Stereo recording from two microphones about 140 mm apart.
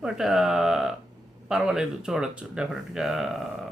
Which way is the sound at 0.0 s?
5° right (ahead or behind).